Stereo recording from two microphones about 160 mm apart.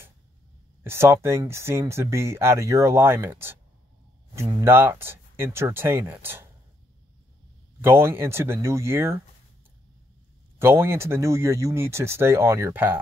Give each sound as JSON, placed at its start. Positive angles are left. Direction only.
{"t": 0.8, "sound": "speech", "side_deg": -15}
{"t": 7.8, "sound": "speech", "side_deg": -15}
{"t": 10.6, "sound": "speech", "side_deg": -15}